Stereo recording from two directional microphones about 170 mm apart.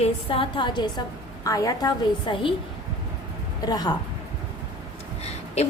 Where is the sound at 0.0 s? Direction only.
30° left (ahead or behind).